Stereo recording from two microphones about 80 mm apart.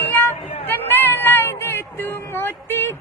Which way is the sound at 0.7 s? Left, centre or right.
Left.